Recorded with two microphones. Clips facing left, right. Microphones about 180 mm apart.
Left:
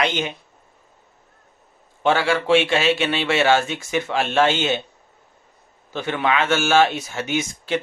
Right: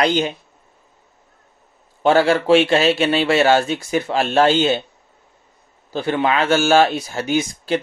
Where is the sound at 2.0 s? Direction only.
40° right (ahead or behind).